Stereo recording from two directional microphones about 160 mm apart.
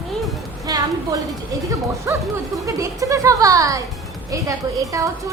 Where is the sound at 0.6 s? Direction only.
20° right (ahead or behind).